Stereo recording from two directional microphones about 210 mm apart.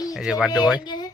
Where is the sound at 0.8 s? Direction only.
20° left (ahead or behind).